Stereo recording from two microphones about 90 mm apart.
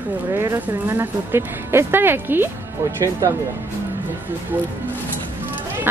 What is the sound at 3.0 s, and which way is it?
Speech, 35° right (ahead or behind).